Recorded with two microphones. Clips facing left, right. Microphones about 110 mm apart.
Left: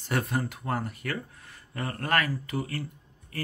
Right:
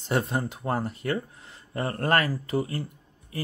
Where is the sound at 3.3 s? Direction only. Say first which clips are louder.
Right 3 dB; 20° right (ahead or behind).